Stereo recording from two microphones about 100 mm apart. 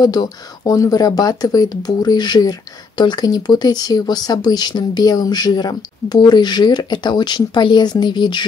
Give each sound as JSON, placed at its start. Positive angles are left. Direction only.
{"t": 0.0, "sound": "speech", "side_deg": 40}